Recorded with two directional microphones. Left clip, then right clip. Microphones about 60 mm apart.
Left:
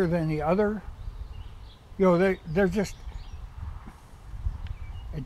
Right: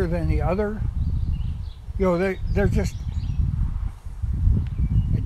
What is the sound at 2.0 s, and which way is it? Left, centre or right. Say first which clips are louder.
Speech: even; centre.